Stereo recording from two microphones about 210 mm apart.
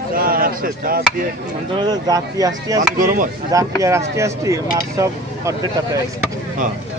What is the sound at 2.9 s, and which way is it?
Speech, 40° right (ahead or behind).